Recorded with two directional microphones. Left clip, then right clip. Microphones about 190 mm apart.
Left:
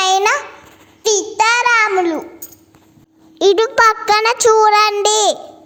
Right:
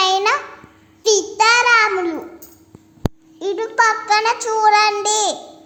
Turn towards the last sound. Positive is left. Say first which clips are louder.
# left 4 dB
turn(degrees=45)  # may be behind; listen again after turning